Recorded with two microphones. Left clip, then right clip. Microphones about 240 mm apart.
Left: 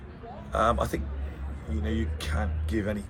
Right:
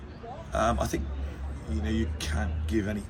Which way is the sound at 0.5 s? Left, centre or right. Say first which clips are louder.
Left 2 dB; centre.